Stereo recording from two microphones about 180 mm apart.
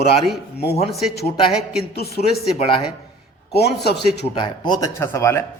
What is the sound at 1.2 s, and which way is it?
Speech, 30° left (ahead or behind).